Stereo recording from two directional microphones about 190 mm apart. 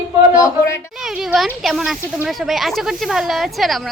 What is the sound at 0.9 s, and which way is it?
Speech, centre (ahead or behind).